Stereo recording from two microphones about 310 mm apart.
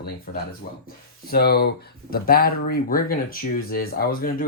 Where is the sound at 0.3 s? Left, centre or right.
Left.